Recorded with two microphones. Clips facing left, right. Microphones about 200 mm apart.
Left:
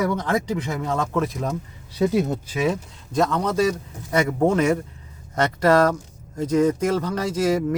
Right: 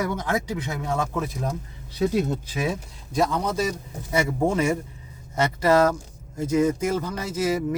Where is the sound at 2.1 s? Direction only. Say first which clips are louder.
Left 2 dB; 50° left (ahead or behind).